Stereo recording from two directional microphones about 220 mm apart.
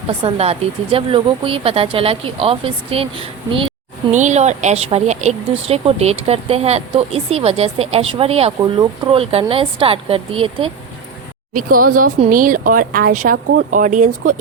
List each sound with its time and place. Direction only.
0.2 s speech: 25° right (ahead or behind)
11.5 s speech: 40° right (ahead or behind)